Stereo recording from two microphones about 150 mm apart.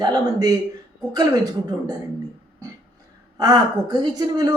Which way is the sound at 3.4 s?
30° right (ahead or behind).